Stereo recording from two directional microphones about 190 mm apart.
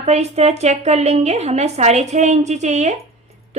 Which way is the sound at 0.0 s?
35° right (ahead or behind).